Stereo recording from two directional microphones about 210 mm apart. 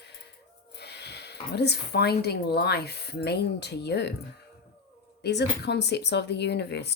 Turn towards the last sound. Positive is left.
turn(degrees=55)  # may be behind; listen again after turning